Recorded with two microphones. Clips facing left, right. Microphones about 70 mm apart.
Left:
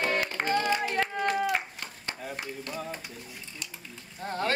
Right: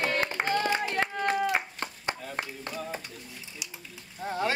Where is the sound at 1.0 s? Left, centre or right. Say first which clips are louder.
Even; centre.